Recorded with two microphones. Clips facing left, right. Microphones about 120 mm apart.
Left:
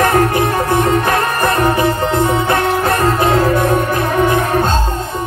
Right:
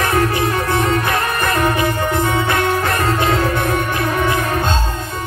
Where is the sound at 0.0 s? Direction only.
45° left (ahead or behind).